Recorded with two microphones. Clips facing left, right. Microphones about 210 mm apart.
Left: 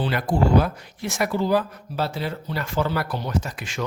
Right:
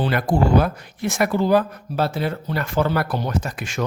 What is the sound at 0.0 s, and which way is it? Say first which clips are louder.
Speech: right 2 dB; 50° right (ahead or behind).